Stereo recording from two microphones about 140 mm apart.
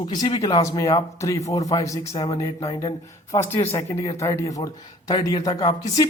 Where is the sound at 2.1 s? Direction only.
40° left (ahead or behind).